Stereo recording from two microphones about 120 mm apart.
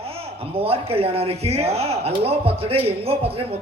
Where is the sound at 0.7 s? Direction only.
55° right (ahead or behind).